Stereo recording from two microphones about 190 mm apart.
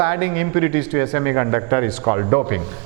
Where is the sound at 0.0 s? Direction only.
15° right (ahead or behind).